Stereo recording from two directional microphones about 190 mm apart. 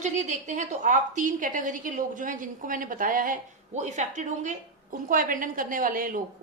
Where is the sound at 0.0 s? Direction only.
40° right (ahead or behind).